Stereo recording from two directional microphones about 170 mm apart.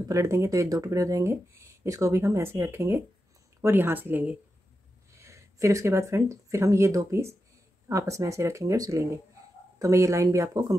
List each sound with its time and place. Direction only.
0.1 s speech: 15° right (ahead or behind)